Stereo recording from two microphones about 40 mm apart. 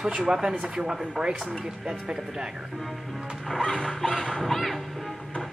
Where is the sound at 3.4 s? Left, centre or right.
Centre.